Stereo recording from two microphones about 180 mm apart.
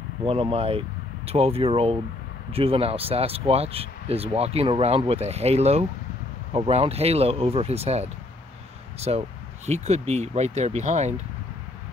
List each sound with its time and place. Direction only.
0.3 s speech: 30° right (ahead or behind)